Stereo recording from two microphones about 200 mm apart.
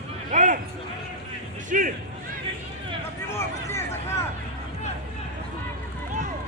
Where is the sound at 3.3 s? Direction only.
15° left (ahead or behind).